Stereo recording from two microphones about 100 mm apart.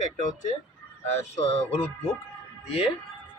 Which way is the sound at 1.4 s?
90° left.